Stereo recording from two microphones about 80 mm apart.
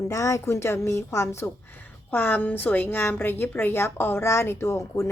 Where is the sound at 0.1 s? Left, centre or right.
Left.